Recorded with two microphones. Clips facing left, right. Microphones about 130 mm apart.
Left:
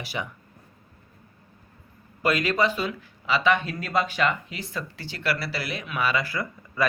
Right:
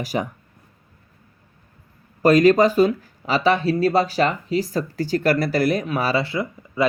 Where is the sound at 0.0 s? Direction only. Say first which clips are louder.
Right 8 dB; 40° right (ahead or behind).